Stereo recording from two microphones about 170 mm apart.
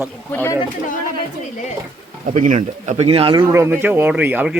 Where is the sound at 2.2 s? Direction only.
45° right (ahead or behind); by 3.5 s 30° right (ahead or behind).